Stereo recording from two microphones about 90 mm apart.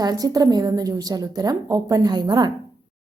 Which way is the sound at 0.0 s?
45° right (ahead or behind).